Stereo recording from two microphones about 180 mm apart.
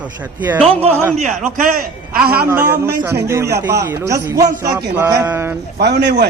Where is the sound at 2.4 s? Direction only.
15° right (ahead or behind).